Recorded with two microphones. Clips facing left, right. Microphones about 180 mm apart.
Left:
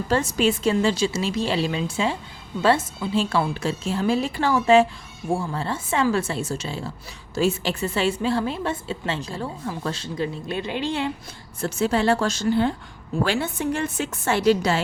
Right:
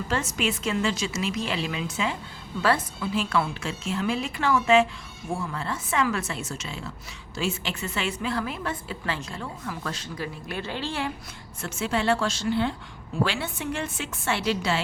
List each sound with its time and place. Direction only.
0.1 s a woman's voice: 35° left (ahead or behind)
11.6 s a woman's voice: 40° left (ahead or behind)